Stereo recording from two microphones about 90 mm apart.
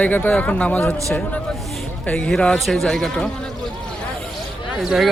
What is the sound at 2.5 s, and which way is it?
Speech, centre (ahead or behind).